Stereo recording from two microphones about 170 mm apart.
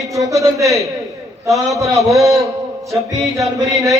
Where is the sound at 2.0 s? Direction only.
Centre (ahead or behind).